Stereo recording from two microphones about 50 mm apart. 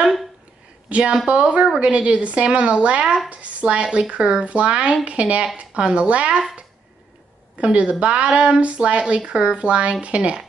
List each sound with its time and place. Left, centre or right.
0.8 s a woman's voice: right
7.5 s a woman's voice: right